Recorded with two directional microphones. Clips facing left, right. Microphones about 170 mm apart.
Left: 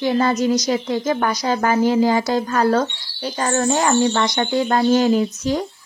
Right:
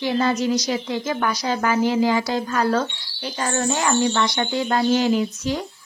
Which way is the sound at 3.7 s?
45° left (ahead or behind).